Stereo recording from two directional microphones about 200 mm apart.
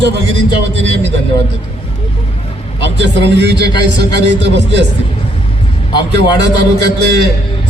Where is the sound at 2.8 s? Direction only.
60° right (ahead or behind).